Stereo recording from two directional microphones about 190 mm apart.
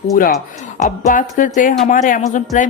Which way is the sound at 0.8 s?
40° left (ahead or behind).